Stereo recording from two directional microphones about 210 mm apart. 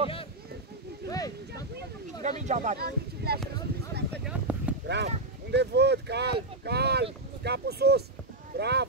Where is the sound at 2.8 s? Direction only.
50° right (ahead or behind).